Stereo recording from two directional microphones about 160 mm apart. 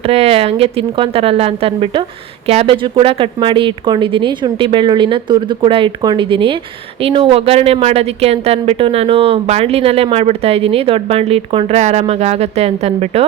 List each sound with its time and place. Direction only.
0.0 s speech: 40° right (ahead or behind)